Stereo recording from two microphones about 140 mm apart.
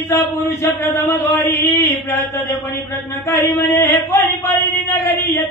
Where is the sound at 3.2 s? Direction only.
15° left (ahead or behind).